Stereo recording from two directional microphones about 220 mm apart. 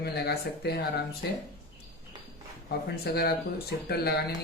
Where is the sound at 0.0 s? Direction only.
45° left (ahead or behind).